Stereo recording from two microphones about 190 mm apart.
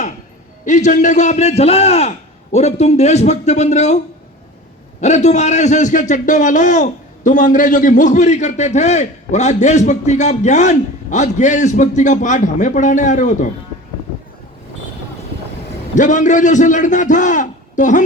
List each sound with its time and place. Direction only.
0.6 s a man's voice: 40° left (ahead or behind)
16.0 s a man's voice: 40° left (ahead or behind)